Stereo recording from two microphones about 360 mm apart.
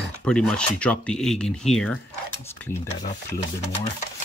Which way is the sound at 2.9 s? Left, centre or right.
Left.